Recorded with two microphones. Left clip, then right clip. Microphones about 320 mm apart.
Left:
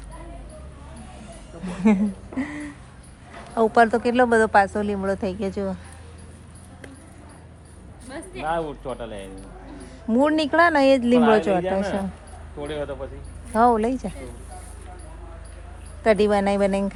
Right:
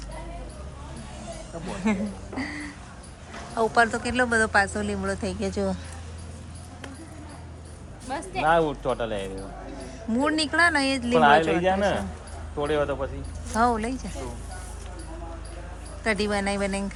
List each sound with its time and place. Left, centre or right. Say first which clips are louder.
1.6 s speech: left 6 dB; centre
3.7 s speech: left 5 dB; centre
8.1 s a sound: right 5 dB; centre
8.4 s speech: right 5 dB; right
10.1 s speech: left 5 dB; centre
12.6 s speech: right 4 dB; right
13.5 s speech: left 5 dB; centre
16.0 s speech: left 7 dB; centre